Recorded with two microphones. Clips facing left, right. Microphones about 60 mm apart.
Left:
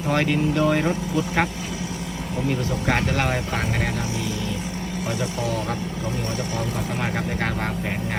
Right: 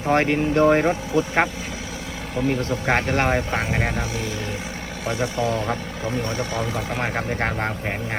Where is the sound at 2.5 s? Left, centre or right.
Right.